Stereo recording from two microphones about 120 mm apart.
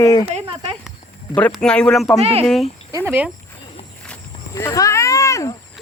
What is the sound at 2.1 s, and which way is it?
Speech, 55° right (ahead or behind).